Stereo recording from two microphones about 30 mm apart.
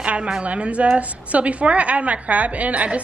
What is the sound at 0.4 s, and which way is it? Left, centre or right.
A woman's voice, right.